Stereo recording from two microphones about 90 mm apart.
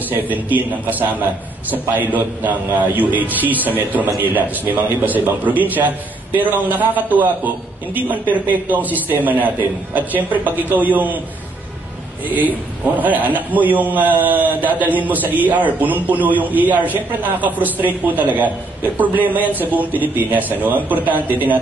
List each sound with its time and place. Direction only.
0.1 s a man's voice: 20° right (ahead or behind)
12.4 s a man's voice: 20° right (ahead or behind)